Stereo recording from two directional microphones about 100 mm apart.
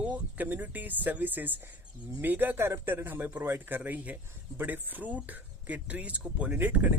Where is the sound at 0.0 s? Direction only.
15° right (ahead or behind).